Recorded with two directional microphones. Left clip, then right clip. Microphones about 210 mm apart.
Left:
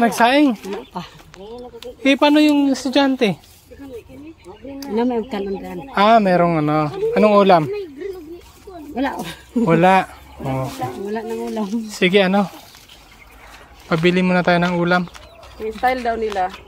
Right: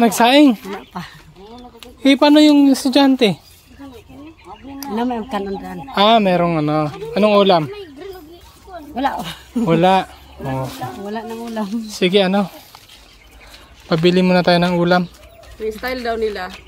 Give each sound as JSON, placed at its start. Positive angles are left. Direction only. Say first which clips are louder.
{"t": 0.2, "sound": "speech", "louder": "right 4 dB", "side_deg": -30}
{"t": 2.0, "sound": "speech", "louder": "right 3 dB", "side_deg": -25}
{"t": 4.9, "sound": "speech", "louder": "left 1 dB", "side_deg": -40}
{"t": 5.9, "sound": "speech", "louder": "even", "side_deg": -20}
{"t": 8.9, "sound": "speech", "louder": "right 3 dB", "side_deg": -45}
{"t": 9.7, "sound": "speech", "louder": "even", "side_deg": 0}
{"t": 11.1, "sound": "speech", "louder": "left 2 dB", "side_deg": -35}
{"t": 11.9, "sound": "speech", "louder": "even", "side_deg": -5}
{"t": 13.8, "sound": "speech", "louder": "right 2 dB", "side_deg": -25}